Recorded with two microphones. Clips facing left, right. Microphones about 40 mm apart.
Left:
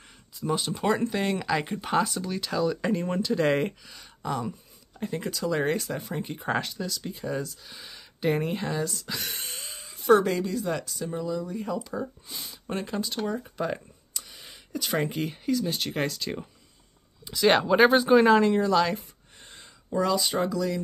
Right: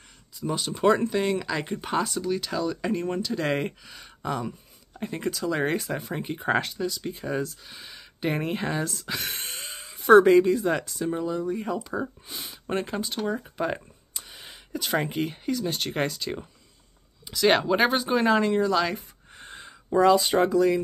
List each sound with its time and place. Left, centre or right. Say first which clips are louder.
0.4 s speech: right 2 dB; centre
7.6 s speech: right 1 dB; centre
8.6 s speech: right 1 dB; right
9.8 s a sound: right 2 dB; centre
10.0 s speech: right 6 dB; right; by 19.0 s centre
19.3 s a sound: right 7 dB; right
20.0 s speech: right 6 dB; right